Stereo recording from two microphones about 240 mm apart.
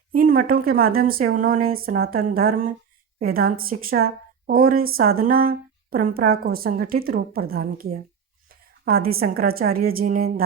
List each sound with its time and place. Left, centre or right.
0.1 s speech: right